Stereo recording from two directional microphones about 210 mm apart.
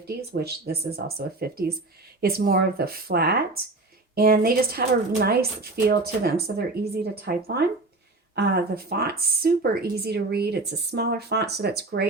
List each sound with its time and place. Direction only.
0.1 s speech: 50° right (ahead or behind)